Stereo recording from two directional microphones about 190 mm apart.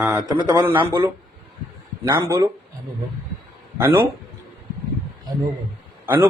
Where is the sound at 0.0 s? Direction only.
15° right (ahead or behind).